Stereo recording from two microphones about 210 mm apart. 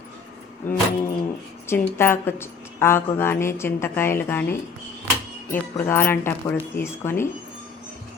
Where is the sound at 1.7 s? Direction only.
10° left (ahead or behind).